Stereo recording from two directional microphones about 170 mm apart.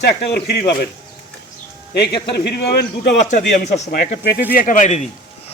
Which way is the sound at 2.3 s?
75° left (ahead or behind).